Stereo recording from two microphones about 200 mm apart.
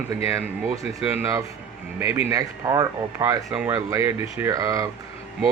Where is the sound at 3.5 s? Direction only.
5° right (ahead or behind).